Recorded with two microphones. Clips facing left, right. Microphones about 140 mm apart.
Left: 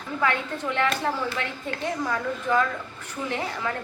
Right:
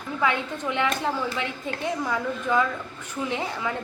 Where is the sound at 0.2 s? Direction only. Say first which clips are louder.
Even; 15° right (ahead or behind).